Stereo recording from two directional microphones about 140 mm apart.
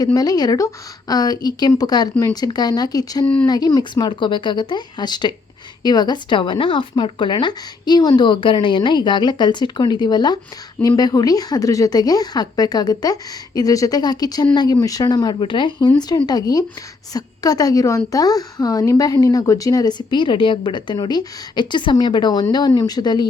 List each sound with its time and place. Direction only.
0.0 s a woman's voice: 30° left (ahead or behind)